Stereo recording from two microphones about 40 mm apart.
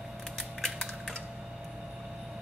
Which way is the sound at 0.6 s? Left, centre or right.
Centre.